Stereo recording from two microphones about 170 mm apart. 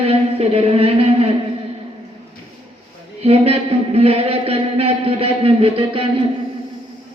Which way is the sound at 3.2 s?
35° right (ahead or behind).